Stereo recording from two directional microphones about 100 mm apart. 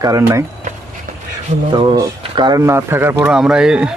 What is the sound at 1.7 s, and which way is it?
Speech, 55° right (ahead or behind).